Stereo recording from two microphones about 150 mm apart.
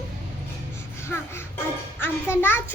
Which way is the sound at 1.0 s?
15° left (ahead or behind).